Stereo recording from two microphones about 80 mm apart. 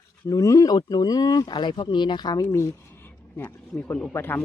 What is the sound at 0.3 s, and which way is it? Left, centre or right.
Speech, left.